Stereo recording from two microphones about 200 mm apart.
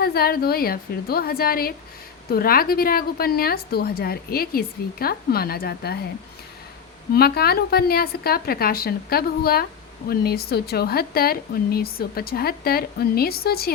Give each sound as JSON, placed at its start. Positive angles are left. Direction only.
{"t": 0.0, "sound": "speech", "side_deg": 50}
{"t": 7.1, "sound": "speech", "side_deg": 50}